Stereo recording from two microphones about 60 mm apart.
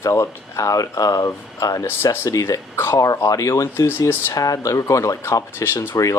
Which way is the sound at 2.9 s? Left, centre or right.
Left.